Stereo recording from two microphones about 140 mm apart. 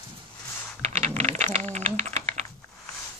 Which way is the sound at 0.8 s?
45° right (ahead or behind).